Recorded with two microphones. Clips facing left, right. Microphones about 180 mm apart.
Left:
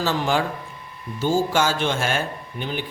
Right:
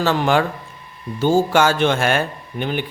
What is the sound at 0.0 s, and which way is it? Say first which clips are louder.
A man's voice: right 5 dB; 65° right (ahead or behind).